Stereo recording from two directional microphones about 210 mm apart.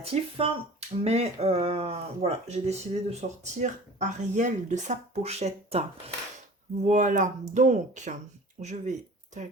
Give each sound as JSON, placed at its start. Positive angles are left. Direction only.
{"t": 0.0, "sound": "speech", "side_deg": -30}
{"t": 6.8, "sound": "speech", "side_deg": -35}